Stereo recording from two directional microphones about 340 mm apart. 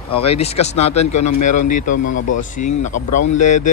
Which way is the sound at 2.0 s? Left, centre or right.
Left.